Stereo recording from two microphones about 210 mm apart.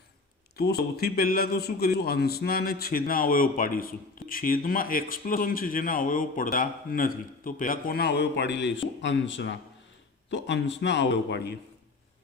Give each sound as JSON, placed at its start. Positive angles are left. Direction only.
{"t": 0.5, "sound": "a man's voice", "side_deg": 50}